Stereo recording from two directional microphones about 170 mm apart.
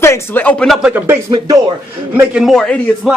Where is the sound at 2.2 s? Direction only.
5° right (ahead or behind).